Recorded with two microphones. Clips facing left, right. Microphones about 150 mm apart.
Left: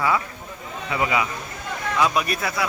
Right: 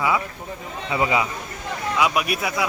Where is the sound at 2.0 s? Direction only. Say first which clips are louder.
Even; 10° right (ahead or behind).